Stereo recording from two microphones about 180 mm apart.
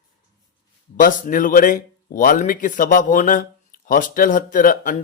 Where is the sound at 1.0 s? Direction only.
50° left (ahead or behind).